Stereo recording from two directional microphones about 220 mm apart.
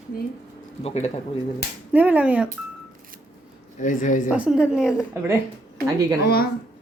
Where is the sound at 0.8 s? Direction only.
30° left (ahead or behind).